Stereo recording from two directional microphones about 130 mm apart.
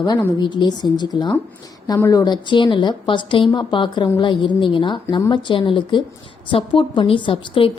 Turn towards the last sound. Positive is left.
turn(degrees=45)  # may be behind; listen again after turning